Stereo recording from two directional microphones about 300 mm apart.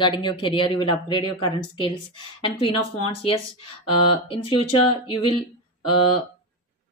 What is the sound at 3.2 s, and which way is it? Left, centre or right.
A woman's voice, centre.